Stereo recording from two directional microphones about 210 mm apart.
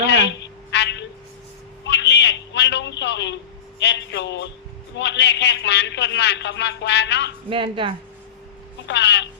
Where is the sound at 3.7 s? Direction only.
55° left (ahead or behind).